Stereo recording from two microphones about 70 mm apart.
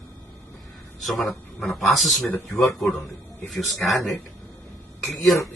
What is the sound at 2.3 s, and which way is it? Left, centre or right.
Speech, left.